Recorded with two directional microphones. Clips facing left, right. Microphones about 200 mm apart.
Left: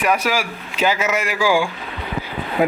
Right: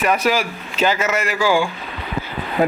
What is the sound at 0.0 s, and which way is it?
Speech, 10° left (ahead or behind).